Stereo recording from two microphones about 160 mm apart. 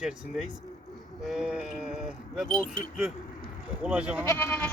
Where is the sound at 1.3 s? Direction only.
5° right (ahead or behind).